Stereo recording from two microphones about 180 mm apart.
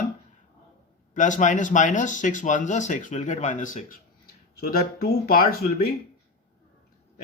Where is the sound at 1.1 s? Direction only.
45° left (ahead or behind).